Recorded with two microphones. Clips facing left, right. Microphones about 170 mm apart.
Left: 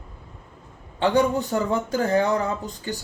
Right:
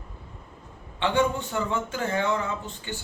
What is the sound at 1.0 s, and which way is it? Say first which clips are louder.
Speech: left 4 dB; 40° left (ahead or behind).